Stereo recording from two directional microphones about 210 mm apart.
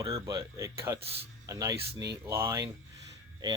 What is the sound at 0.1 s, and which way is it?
Speech, 20° right (ahead or behind).